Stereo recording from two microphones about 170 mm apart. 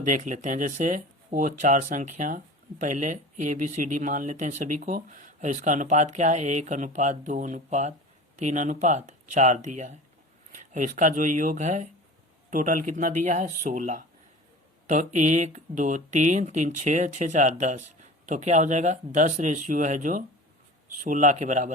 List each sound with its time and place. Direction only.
0.0 s speech: 50° right (ahead or behind)